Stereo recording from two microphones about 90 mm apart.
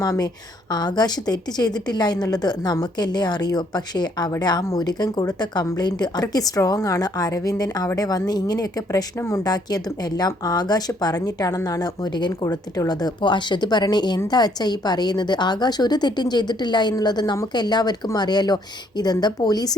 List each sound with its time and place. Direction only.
0.0 s speech: 45° left (ahead or behind)